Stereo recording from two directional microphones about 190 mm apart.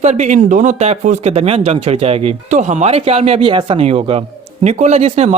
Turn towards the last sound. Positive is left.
turn(degrees=-35)  # may be behind; listen again after turning